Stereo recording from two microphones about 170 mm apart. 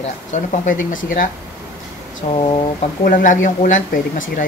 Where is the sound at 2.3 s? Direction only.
30° left (ahead or behind).